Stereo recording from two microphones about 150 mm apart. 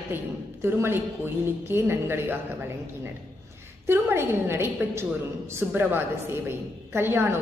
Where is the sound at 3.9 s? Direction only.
15° right (ahead or behind).